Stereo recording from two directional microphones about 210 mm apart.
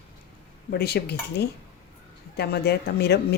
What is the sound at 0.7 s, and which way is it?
Speech, 50° left (ahead or behind).